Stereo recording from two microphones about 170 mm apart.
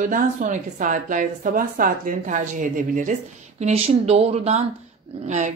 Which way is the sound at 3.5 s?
40° right (ahead or behind).